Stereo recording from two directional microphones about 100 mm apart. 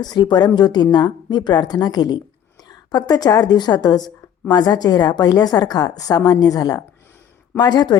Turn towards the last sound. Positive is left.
turn(degrees=45)  # may be behind; listen again after turning